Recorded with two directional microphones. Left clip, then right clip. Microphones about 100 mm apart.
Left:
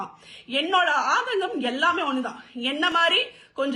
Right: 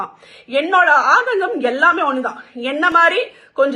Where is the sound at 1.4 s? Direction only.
25° left (ahead or behind).